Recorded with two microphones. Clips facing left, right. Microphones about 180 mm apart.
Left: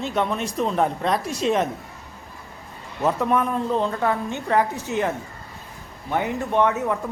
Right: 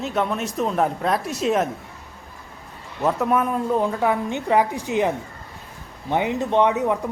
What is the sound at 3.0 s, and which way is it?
A man's voice, centre (ahead or behind).